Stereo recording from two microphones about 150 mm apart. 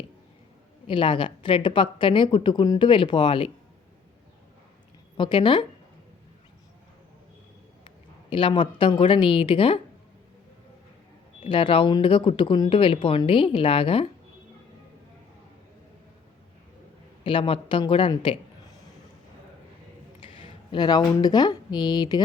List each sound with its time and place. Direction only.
0.9 s a woman's voice: 35° left (ahead or behind)
5.1 s a woman's voice: 35° left (ahead or behind)
7.9 s speech: 35° left (ahead or behind)
11.4 s a woman's voice: 35° left (ahead or behind)
17.2 s a woman's voice: 35° left (ahead or behind)
20.2 s speech: 35° left (ahead or behind)